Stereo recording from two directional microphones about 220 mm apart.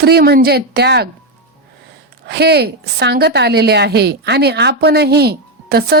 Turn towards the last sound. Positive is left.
turn(degrees=-45)  # may be behind; listen again after turning